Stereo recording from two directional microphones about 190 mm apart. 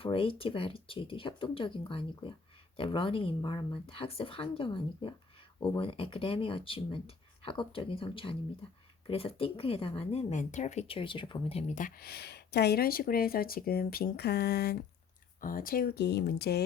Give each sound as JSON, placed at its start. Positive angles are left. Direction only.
{"t": 0.0, "sound": "speech", "side_deg": 30}
{"t": 11.7, "sound": "speech", "side_deg": 45}
{"t": 15.4, "sound": "speech", "side_deg": 45}